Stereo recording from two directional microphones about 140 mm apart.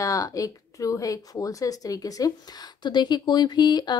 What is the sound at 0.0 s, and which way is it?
Speech, 25° left (ahead or behind).